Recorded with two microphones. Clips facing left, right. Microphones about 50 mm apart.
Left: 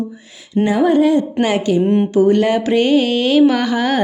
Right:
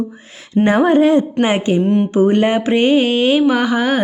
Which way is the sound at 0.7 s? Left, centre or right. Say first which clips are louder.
Right 1 dB; right.